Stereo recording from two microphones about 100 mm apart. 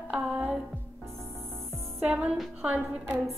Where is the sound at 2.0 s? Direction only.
15° right (ahead or behind).